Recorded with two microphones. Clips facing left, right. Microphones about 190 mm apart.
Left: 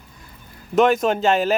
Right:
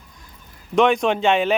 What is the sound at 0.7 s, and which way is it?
Speech, centre (ahead or behind).